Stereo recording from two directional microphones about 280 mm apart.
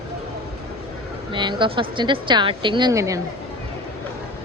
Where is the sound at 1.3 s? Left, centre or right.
Centre.